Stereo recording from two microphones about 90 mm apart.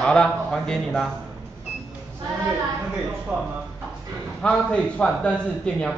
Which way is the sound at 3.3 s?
20° right (ahead or behind).